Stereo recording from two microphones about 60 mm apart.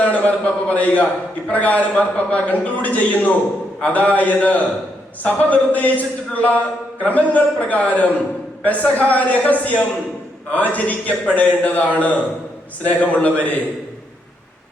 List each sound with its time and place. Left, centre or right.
0.0 s a man's voice: left